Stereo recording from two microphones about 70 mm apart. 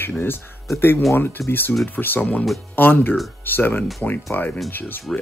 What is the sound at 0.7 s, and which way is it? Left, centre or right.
A man's voice, left.